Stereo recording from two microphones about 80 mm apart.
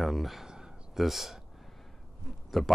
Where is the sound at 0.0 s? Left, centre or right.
Centre.